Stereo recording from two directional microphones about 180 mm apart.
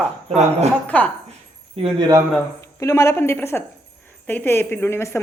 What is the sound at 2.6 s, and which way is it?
A woman's voice, 15° left (ahead or behind).